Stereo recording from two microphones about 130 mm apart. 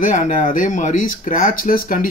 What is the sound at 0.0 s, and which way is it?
Speech, 80° left.